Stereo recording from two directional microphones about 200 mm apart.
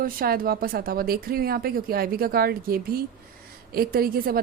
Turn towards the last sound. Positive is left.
turn(degrees=-45)  # may be behind; listen again after turning